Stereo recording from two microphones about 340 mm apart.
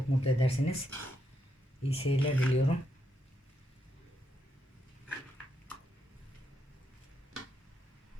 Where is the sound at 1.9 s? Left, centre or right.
Centre.